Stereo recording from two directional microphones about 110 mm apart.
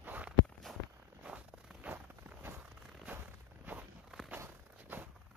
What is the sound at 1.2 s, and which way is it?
Zipper, 10° right (ahead or behind).